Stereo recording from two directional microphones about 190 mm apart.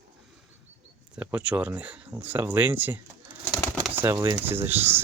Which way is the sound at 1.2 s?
10° right (ahead or behind).